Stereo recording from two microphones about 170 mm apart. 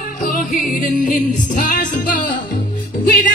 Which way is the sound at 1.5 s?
50° left (ahead or behind).